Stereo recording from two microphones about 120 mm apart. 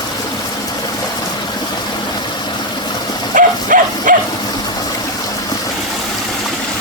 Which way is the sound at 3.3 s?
90° right.